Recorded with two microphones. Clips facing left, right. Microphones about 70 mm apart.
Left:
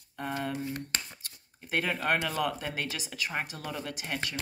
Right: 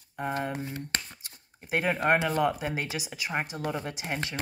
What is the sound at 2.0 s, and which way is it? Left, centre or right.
Speech, right.